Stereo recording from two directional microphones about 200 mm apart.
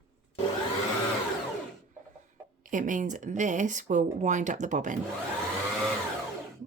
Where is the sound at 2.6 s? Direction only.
40° right (ahead or behind).